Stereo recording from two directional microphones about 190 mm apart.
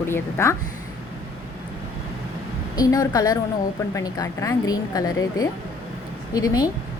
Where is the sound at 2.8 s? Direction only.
20° left (ahead or behind).